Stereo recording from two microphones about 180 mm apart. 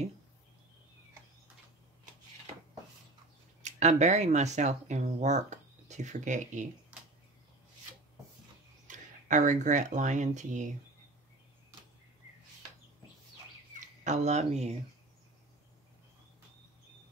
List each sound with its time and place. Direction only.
3.6 s speech: 40° right (ahead or behind)
8.8 s speech: 45° right (ahead or behind)
13.7 s speech: 40° right (ahead or behind)